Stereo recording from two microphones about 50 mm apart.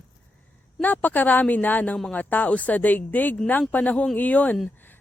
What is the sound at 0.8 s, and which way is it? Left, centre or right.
A woman's voice, left.